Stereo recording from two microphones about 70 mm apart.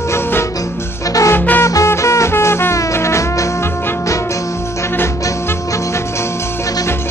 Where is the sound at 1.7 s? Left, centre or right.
Left.